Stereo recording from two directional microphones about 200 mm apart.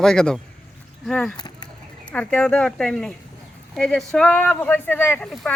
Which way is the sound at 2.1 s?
5° left (ahead or behind).